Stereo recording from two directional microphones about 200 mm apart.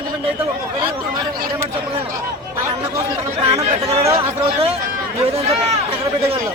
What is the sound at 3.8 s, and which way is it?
Chatter, 30° right (ahead or behind).